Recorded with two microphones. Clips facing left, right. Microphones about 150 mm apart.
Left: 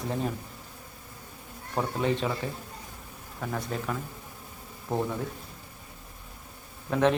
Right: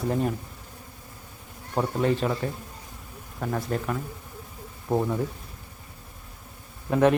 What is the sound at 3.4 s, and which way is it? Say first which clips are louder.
Speech: right 4 dB; 10° right (ahead or behind).